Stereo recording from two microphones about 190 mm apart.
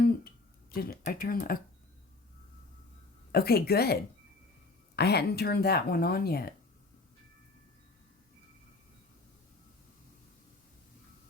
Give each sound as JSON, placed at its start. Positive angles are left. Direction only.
{"t": 0.7, "sound": "speech", "side_deg": 55}
{"t": 3.3, "sound": "speech", "side_deg": 55}
{"t": 4.9, "sound": "speech", "side_deg": 60}